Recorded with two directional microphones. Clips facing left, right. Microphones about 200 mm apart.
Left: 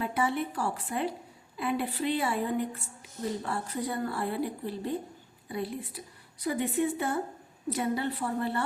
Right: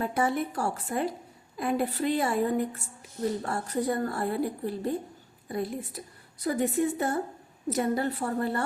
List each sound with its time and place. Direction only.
0.0 s a woman's voice: 45° right (ahead or behind)